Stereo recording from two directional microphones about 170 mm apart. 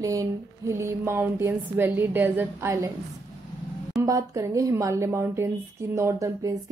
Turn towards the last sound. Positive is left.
turn(degrees=-20)  # may be behind; listen again after turning